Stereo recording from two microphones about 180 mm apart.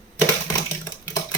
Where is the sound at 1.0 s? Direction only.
20° left (ahead or behind).